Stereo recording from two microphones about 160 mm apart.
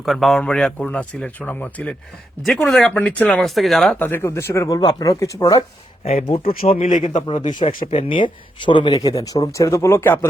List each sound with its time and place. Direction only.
0.0 s speech: centre (ahead or behind); by 5.6 s 20° left (ahead or behind)
6.4 s speech: 65° left (ahead or behind)
6.7 s speech: 45° left (ahead or behind)
7.2 s speech: 30° left (ahead or behind); by 10.2 s 15° left (ahead or behind)